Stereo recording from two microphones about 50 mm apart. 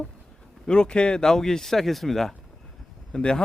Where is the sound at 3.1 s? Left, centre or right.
Centre.